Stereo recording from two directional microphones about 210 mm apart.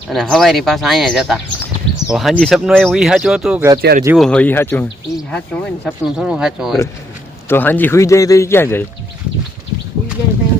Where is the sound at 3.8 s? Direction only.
45° right (ahead or behind).